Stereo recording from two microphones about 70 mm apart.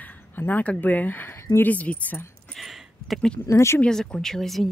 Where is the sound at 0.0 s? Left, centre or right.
Left.